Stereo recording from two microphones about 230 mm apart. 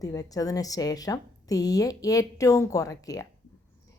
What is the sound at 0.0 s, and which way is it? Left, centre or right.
Speech, centre.